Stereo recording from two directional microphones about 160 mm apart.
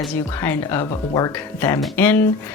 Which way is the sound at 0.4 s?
15° left (ahead or behind).